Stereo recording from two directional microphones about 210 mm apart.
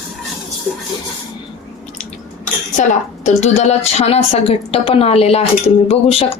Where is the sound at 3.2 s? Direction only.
30° left (ahead or behind).